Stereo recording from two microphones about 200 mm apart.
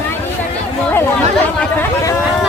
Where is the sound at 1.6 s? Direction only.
10° left (ahead or behind).